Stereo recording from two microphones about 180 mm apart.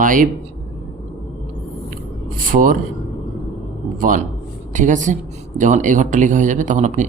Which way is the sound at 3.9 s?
50° right (ahead or behind).